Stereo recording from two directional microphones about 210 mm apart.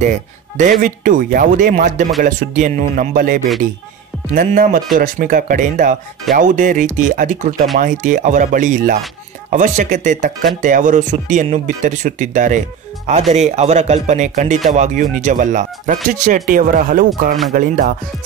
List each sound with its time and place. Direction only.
0.6 s speech: 40° right (ahead or behind)